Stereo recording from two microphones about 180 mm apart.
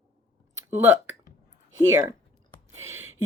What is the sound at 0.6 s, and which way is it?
Speech, 10° right (ahead or behind).